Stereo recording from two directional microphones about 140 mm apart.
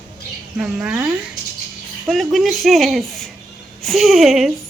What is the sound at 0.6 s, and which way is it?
A woman's voice, 10° right (ahead or behind).